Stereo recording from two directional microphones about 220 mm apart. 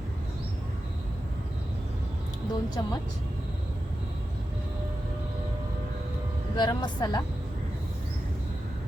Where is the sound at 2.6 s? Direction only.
20° left (ahead or behind).